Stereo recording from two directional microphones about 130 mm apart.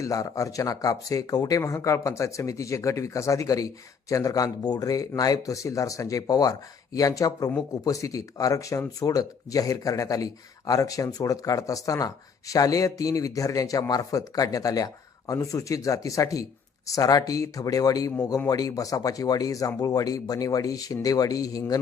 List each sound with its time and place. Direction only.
0.0 s speech: 25° left (ahead or behind)